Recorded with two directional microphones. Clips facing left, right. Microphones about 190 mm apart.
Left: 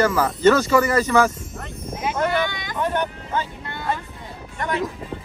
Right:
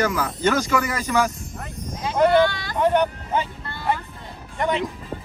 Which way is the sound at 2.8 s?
20° right (ahead or behind).